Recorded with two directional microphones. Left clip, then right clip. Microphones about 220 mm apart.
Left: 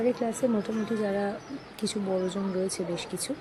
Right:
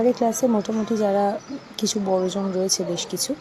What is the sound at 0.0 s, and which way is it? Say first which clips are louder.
Speech: right 7 dB; 10° right (ahead or behind).